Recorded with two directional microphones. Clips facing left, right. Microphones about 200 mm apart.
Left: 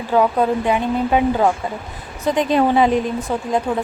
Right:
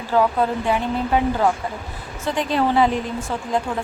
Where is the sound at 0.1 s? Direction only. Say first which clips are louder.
Left 3 dB; 20° left (ahead or behind).